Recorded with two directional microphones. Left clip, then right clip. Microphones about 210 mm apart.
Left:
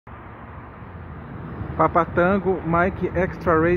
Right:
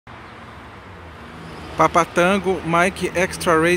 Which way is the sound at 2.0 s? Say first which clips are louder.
Right 3 dB; 20° right (ahead or behind).